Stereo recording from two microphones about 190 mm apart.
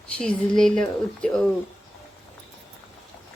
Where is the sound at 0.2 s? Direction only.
5° left (ahead or behind).